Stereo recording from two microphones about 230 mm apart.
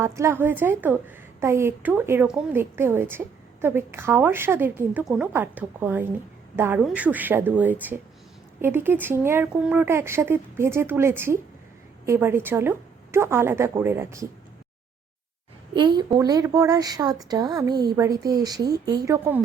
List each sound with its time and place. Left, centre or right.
0.0 s a woman's voice: centre
15.7 s a woman's voice: centre